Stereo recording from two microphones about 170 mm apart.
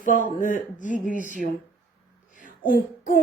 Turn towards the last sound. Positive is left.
turn(degrees=50)  # may be behind; listen again after turning